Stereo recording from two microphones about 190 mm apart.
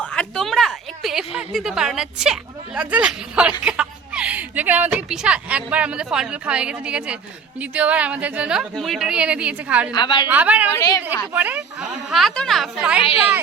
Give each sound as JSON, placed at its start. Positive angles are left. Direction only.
{"t": 0.0, "sound": "a woman's voice", "side_deg": 5}
{"t": 9.9, "sound": "a woman's voice", "side_deg": 25}
{"t": 10.2, "sound": "speech", "side_deg": -10}
{"t": 10.8, "sound": "a woman's voice", "side_deg": 20}
{"t": 11.3, "sound": "a woman's voice", "side_deg": -10}